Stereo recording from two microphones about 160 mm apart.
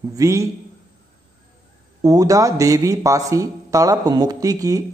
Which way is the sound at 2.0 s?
20° right (ahead or behind).